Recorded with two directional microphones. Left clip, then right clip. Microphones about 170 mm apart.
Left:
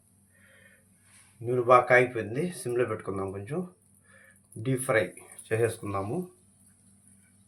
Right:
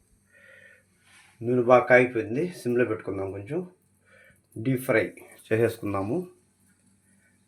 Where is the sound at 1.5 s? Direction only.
45° right (ahead or behind).